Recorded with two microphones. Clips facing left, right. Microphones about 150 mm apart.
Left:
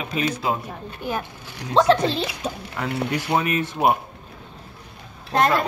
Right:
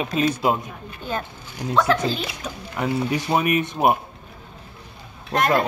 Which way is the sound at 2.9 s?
65° left (ahead or behind).